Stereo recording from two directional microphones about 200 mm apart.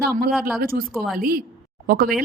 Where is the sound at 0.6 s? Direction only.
45° right (ahead or behind).